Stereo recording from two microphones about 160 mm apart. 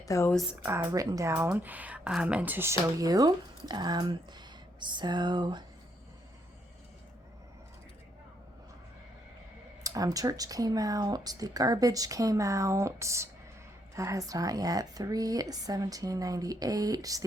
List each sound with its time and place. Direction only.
0.0 s speech: 20° left (ahead or behind)
0.6 s speech: 15° right (ahead or behind)
9.8 s speech: 20° right (ahead or behind)